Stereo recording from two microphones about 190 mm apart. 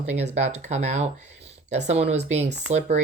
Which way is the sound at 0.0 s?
40° right (ahead or behind).